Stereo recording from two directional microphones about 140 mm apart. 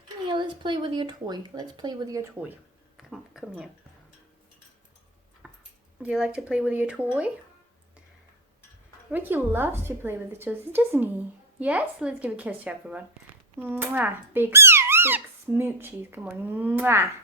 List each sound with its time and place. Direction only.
0.3 s speech: 35° right (ahead or behind)
3.0 s speech: centre (ahead or behind)
5.4 s a sound: 10° right (ahead or behind)
6.0 s a woman's voice: 5° right (ahead or behind)
9.1 s a woman's voice: 15° right (ahead or behind)